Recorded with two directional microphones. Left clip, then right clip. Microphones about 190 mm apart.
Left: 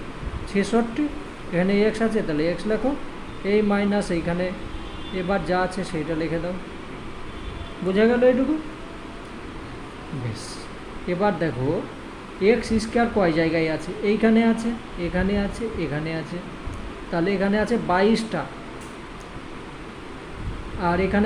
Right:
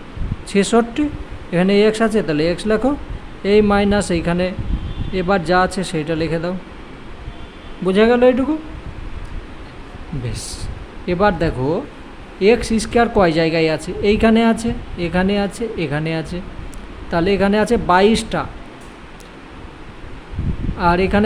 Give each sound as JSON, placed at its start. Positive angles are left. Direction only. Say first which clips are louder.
{"t": 0.5, "sound": "speech", "louder": "right 7 dB", "side_deg": -55}
{"t": 7.9, "sound": "speech", "louder": "right 5 dB", "side_deg": -55}
{"t": 11.0, "sound": "speech", "louder": "right 6 dB", "side_deg": -50}
{"t": 20.7, "sound": "speech", "louder": "right 7 dB", "side_deg": -50}